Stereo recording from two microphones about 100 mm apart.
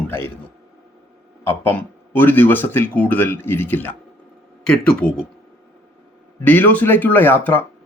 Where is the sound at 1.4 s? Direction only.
20° left (ahead or behind).